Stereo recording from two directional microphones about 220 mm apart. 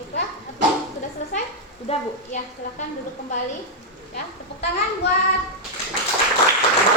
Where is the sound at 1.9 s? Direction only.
30° left (ahead or behind).